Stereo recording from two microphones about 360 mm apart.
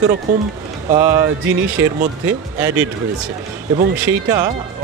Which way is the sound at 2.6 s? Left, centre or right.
Centre.